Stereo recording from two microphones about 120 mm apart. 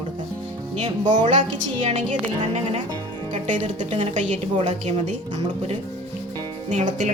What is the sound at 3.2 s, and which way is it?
A woman's voice, 90° right.